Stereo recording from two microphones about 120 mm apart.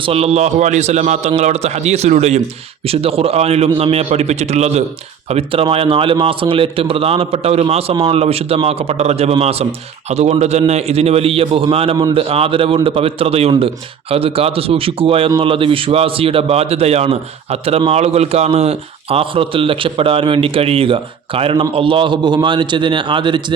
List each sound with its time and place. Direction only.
0.0 s a man's voice: 55° right (ahead or behind)
2.8 s a man's voice: 55° right (ahead or behind)
5.3 s a man's voice: 55° right (ahead or behind)